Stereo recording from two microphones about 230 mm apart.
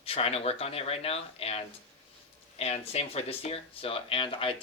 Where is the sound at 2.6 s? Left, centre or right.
Left.